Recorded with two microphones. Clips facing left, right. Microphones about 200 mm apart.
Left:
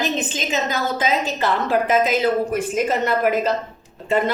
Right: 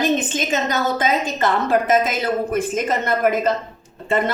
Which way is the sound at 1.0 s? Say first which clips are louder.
Right 1 dB; 50° right (ahead or behind).